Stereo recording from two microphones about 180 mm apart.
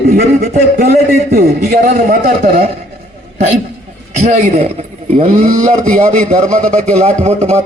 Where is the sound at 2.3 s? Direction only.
55° right (ahead or behind).